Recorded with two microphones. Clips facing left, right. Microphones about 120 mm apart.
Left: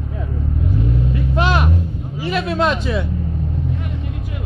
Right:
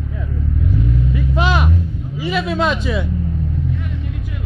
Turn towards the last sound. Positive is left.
turn(degrees=0)  # may be behind; listen again after turning